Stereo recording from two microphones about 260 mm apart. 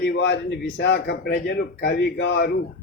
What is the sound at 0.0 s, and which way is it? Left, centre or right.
Speech, left.